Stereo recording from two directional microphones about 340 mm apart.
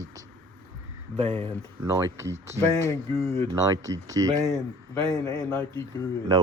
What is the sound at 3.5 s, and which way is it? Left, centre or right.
Speech, centre.